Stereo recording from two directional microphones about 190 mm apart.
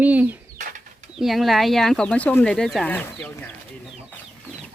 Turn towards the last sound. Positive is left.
turn(degrees=5)  # may be behind; listen again after turning